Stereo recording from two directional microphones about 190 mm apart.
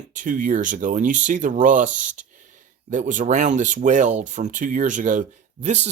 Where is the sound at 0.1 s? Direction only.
45° right (ahead or behind).